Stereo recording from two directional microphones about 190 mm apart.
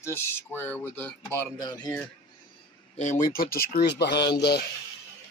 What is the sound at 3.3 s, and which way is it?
Speech, 50° left (ahead or behind).